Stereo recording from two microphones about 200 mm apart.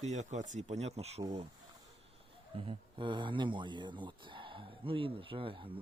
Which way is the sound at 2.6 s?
25° right (ahead or behind).